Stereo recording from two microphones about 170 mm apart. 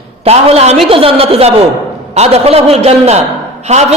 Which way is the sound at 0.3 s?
35° right (ahead or behind).